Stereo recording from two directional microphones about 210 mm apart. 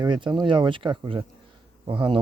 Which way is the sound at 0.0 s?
20° right (ahead or behind).